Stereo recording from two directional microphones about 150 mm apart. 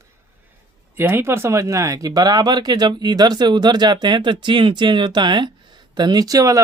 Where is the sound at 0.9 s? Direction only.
15° right (ahead or behind).